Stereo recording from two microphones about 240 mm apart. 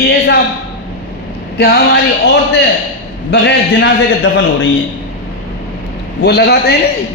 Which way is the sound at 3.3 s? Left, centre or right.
Left.